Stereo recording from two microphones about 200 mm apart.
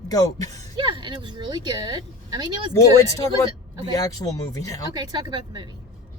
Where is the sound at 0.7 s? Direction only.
25° right (ahead or behind).